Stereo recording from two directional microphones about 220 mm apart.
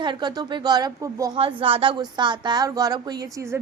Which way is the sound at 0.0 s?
20° right (ahead or behind).